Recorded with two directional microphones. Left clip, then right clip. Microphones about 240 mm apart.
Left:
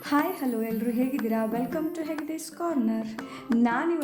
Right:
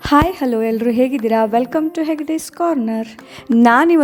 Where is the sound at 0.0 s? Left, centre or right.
Right.